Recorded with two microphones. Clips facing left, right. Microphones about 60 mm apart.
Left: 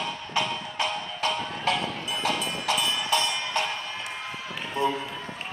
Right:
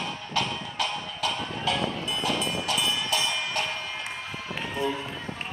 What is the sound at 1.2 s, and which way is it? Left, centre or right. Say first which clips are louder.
Music: left 2 dB; left.